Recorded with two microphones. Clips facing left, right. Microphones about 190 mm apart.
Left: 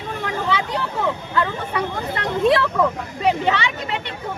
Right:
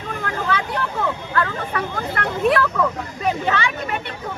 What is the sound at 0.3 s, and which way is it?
Vehicle, 15° left (ahead or behind).